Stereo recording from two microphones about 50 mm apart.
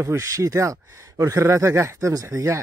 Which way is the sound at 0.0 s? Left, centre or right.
Right.